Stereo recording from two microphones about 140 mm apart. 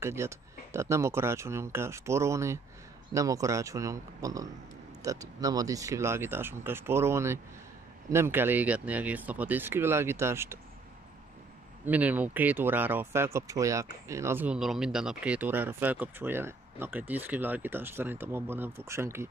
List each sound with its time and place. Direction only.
0.0 s speech: 20° right (ahead or behind)
11.8 s speech: 10° right (ahead or behind)